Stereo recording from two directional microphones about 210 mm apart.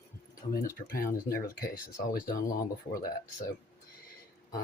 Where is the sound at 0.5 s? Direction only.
45° left (ahead or behind).